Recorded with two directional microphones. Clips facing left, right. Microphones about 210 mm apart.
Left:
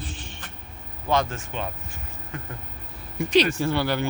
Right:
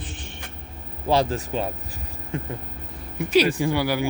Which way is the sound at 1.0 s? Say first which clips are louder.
Right 3 dB; 35° right (ahead or behind).